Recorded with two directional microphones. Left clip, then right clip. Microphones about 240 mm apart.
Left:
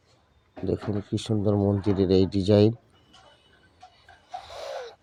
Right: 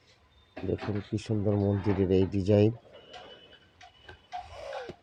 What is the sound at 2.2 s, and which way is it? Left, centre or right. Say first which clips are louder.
Speech: left 4 dB; left.